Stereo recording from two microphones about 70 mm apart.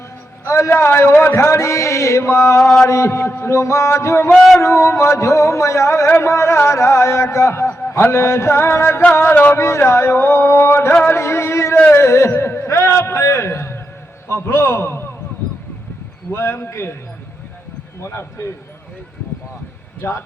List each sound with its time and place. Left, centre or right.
0.4 s a man's voice: left
0.7 s mantra: left
6.1 s a man's voice: left
7.7 s a sound: left
9.2 s a sound: left
9.6 s a man's voice: left
11.0 s a sound: left
14.3 s a man's voice: left
16.3 s a man's voice: left
18.0 s a man's voice: left
20.0 s a man's voice: left